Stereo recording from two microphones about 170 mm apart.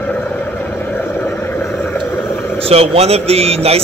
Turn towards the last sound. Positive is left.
turn(degrees=-35)  # may be behind; listen again after turning